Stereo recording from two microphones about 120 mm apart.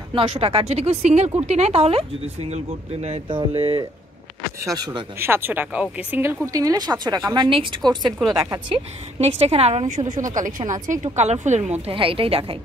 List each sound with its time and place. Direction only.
0.1 s speech: 45° right (ahead or behind); by 3.2 s 60° right (ahead or behind)
3.3 s a woman's voice: 45° right (ahead or behind)
5.2 s speech: 20° right (ahead or behind)
6.2 s a woman's voice: 25° right (ahead or behind)
7.4 s a woman's voice: 45° right (ahead or behind); by 8.5 s 30° right (ahead or behind)
8.7 s a woman's voice: 55° right (ahead or behind); by 11.1 s 90° right
11.1 s speech: 75° right (ahead or behind)
11.8 s a woman's voice: 50° right (ahead or behind)